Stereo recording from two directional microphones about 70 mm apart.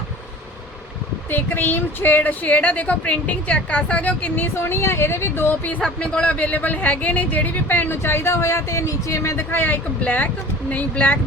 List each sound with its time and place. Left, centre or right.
1.3 s a woman's voice: left
5.8 s a woman's voice: centre